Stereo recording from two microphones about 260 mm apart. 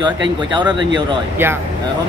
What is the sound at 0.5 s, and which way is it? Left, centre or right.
Speech, centre.